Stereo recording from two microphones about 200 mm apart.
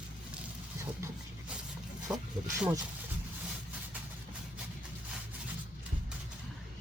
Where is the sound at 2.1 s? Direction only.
5° right (ahead or behind).